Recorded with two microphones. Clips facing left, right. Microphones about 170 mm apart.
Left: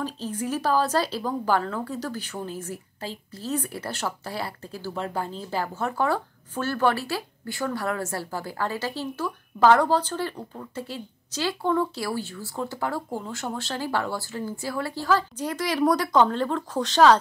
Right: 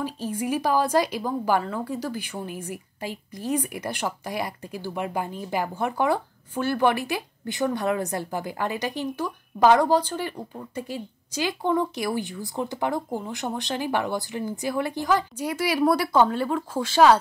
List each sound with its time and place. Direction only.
0.0 s a woman's voice: 10° right (ahead or behind)